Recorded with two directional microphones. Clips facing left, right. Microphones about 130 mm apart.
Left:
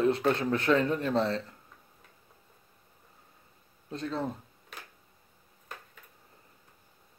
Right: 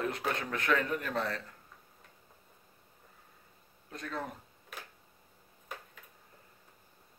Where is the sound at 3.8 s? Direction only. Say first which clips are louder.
Left 6 dB; 25° left (ahead or behind).